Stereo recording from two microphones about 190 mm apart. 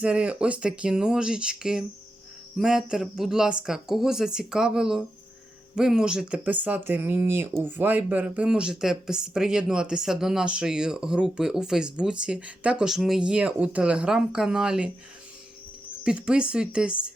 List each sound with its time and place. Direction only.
0.0 s speech: 5° right (ahead or behind)
16.0 s speech: 5° right (ahead or behind)